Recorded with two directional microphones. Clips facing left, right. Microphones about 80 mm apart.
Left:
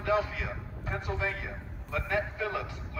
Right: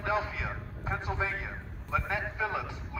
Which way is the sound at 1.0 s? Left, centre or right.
Right.